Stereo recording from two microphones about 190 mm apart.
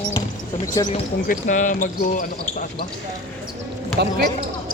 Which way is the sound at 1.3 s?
40° left (ahead or behind).